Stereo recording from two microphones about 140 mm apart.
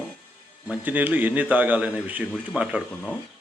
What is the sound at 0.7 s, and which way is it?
A man's voice, 10° right (ahead or behind).